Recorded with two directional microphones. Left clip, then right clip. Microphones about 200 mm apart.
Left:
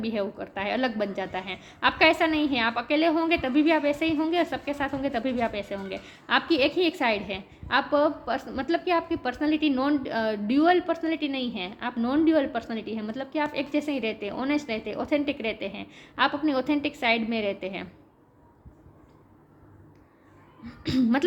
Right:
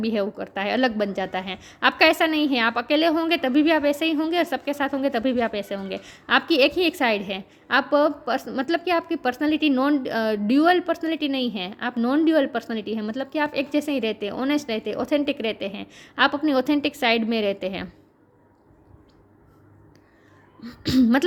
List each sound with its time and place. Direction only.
0.0 s a woman's voice: 50° right (ahead or behind)
20.7 s a woman's voice: 45° right (ahead or behind)